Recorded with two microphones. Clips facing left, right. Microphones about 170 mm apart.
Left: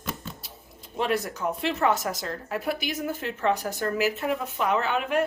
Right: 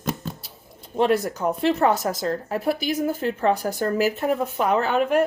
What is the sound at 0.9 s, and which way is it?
Speech, 35° right (ahead or behind).